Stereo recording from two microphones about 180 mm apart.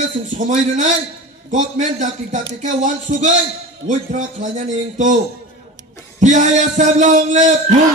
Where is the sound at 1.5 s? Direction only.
45° right (ahead or behind).